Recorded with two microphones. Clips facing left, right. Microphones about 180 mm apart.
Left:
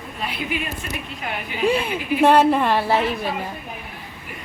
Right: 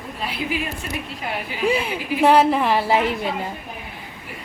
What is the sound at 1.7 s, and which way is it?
A woman's voice, 10° right (ahead or behind).